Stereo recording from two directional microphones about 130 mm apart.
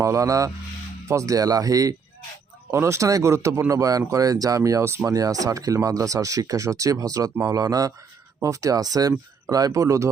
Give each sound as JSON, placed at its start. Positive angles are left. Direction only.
{"t": 0.0, "sound": "speech", "side_deg": -25}